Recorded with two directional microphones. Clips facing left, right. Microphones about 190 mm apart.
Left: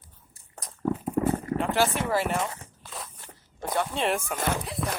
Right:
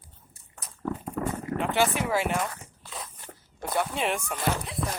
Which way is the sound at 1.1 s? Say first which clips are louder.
Left 4 dB; 35° left (ahead or behind).